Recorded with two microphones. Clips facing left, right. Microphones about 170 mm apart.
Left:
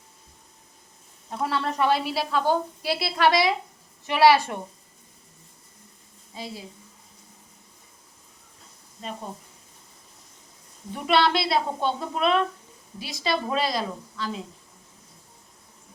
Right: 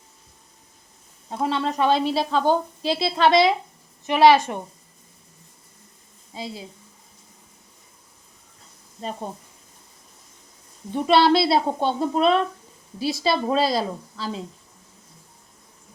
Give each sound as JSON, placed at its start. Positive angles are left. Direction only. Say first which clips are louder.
{"t": 1.3, "sound": "a woman's voice", "louder": "right 3 dB", "side_deg": -20}
{"t": 6.3, "sound": "a woman's voice", "louder": "right 3 dB", "side_deg": -30}
{"t": 10.9, "sound": "a woman's voice", "louder": "right 5 dB", "side_deg": -30}